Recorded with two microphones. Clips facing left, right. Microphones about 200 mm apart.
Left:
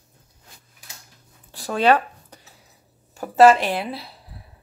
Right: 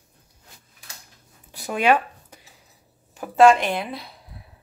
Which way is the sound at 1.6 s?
10° right (ahead or behind).